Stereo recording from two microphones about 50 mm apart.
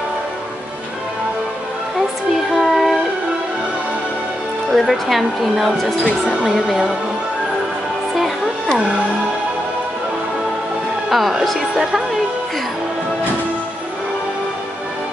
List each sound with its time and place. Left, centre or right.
2.3 s music: centre
4.7 s speech: centre
8.2 s music: centre
11.1 s speech: centre